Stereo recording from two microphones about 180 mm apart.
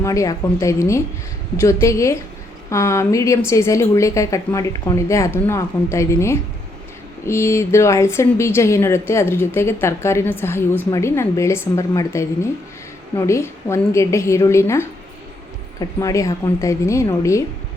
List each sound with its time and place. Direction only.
0.0 s speech: 15° left (ahead or behind)